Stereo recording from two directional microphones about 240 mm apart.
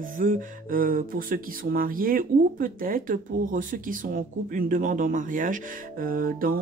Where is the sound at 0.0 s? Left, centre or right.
Right.